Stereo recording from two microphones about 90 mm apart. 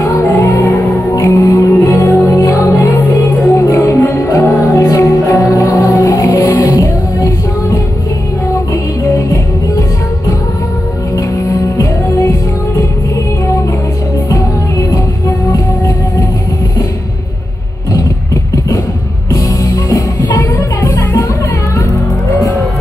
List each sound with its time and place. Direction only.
0.4 s music: 35° left (ahead or behind)
11.1 s music: 40° left (ahead or behind)
14.3 s music: 35° left (ahead or behind)
19.3 s music: 40° left (ahead or behind)
20.2 s music: 30° left (ahead or behind)